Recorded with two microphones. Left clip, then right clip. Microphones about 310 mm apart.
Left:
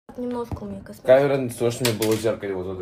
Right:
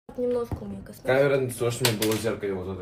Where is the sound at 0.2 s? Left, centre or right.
Centre.